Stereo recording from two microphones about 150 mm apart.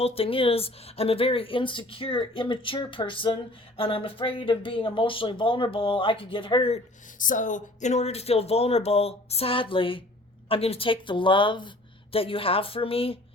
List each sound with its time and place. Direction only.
0.0 s speech: 40° left (ahead or behind)
7.2 s speech: 60° left (ahead or behind); by 13.1 s 40° left (ahead or behind)